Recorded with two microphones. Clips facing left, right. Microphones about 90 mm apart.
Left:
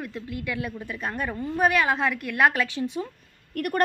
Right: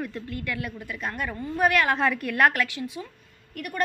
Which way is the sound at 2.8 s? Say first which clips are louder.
Left 5 dB; 40° left (ahead or behind).